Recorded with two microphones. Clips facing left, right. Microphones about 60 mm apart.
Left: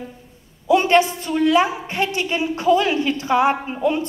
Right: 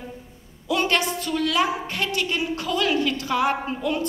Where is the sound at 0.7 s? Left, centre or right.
Left.